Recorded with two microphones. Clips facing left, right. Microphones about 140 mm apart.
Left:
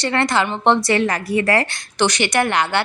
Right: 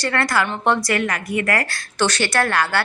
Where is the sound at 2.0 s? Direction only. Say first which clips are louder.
Left 2 dB; 15° left (ahead or behind).